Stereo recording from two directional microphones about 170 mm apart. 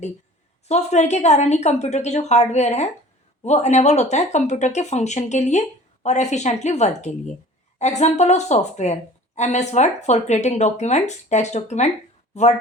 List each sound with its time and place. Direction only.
0.7 s a woman's voice: 40° left (ahead or behind)